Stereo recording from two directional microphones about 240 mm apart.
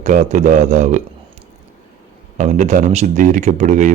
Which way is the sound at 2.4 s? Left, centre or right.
Right.